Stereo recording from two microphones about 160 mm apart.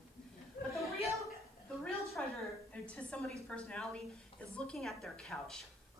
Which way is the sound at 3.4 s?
5° left (ahead or behind).